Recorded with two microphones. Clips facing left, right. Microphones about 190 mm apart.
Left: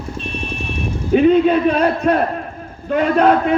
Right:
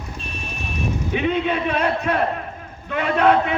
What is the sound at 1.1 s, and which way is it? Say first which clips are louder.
A man's voice: left 11 dB; 40° left (ahead or behind).